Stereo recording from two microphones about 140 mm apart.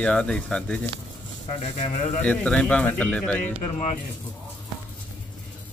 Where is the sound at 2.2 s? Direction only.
5° left (ahead or behind).